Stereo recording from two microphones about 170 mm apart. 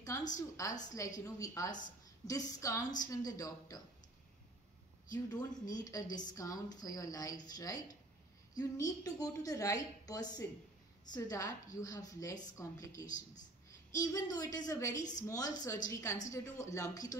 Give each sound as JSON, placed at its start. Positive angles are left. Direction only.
{"t": 0.3, "sound": "a woman's voice", "side_deg": 20}
{"t": 5.1, "sound": "a woman's voice", "side_deg": 25}
{"t": 13.0, "sound": "speech", "side_deg": 50}
{"t": 13.9, "sound": "a woman's voice", "side_deg": 20}